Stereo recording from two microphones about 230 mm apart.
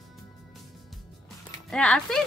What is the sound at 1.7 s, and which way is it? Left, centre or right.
Speech, centre.